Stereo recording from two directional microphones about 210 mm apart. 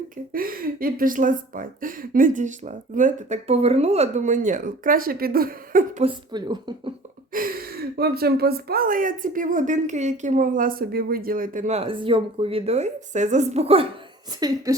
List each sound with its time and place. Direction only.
0.3 s speech: 45° right (ahead or behind)
6.0 s speech: 20° right (ahead or behind)
7.3 s speech: 45° right (ahead or behind); by 13.8 s 30° right (ahead or behind)
14.3 s speech: 15° right (ahead or behind)